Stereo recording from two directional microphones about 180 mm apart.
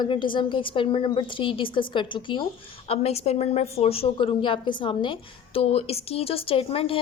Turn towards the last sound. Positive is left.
turn(degrees=30)  # may be behind; listen again after turning